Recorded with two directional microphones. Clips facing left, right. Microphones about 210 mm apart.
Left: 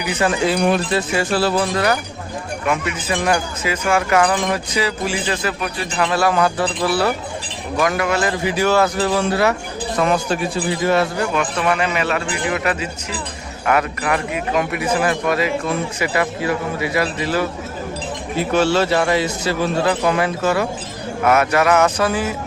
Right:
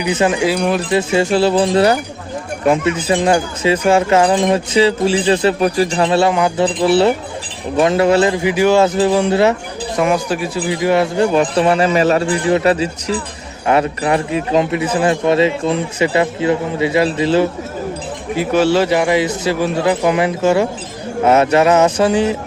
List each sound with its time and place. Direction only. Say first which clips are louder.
0.0 s speech: right 4 dB; 20° right (ahead or behind)
0.4 s speech: right 1 dB; 5° right (ahead or behind)
0.9 s speech: right 5 dB; 20° right (ahead or behind)
11.2 s a man's voice: right 7 dB; 30° right (ahead or behind)
18.3 s speech: right 3 dB; 10° right (ahead or behind); by 22.4 s 25° right (ahead or behind)